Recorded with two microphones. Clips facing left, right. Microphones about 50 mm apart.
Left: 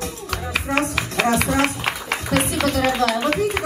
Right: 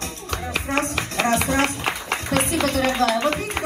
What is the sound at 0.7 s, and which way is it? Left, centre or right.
Music, right.